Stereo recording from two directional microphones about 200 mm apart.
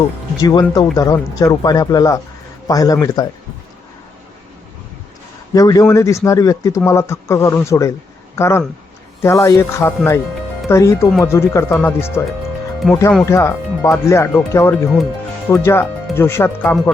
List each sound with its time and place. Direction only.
0.4 s speech: 20° left (ahead or behind)
5.5 s speech: 20° left (ahead or behind); by 13.0 s centre (ahead or behind)
13.2 s speech: 15° left (ahead or behind)